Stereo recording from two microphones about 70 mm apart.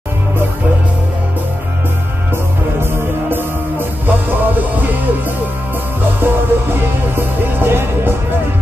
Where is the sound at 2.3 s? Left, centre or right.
Right.